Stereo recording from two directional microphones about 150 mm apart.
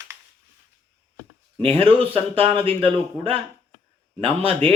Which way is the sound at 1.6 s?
40° right (ahead or behind).